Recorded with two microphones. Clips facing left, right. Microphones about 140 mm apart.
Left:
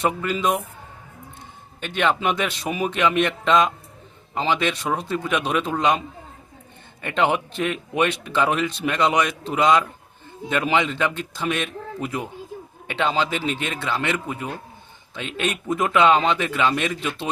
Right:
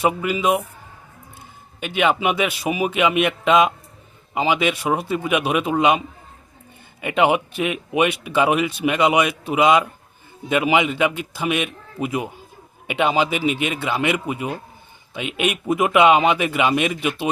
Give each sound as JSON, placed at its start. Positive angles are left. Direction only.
{"t": 0.0, "sound": "speech", "side_deg": -10}
{"t": 1.8, "sound": "speech", "side_deg": -10}
{"t": 7.0, "sound": "speech", "side_deg": -10}